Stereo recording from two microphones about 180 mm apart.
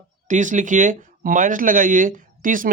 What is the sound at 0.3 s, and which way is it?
Speech, 45° right (ahead or behind).